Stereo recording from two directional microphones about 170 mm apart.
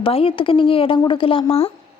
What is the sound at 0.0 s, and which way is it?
Speech, 35° left (ahead or behind).